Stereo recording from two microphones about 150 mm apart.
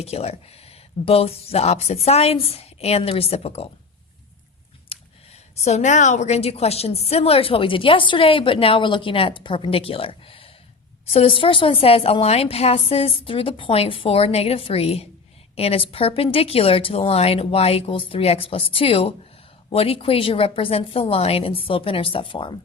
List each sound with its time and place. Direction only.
0.0 s speech: 45° left (ahead or behind)
4.9 s a woman's voice: 45° left (ahead or behind)